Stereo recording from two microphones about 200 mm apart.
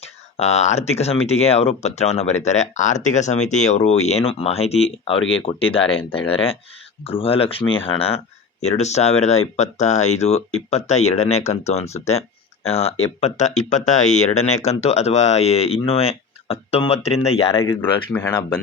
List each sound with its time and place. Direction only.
0.0 s speech: 35° left (ahead or behind)
17.5 s speech: 15° left (ahead or behind)